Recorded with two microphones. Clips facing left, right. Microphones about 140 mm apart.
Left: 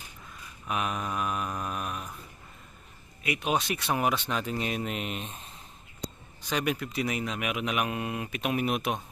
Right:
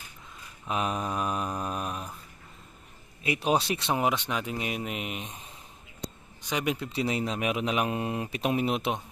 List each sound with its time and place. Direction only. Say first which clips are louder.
0.7 s mantra: right 2 dB; 30° right (ahead or behind)
3.2 s speech: right 3 dB; 30° right (ahead or behind); by 5.5 s 15° right (ahead or behind)
6.5 s speech: even; 20° right (ahead or behind)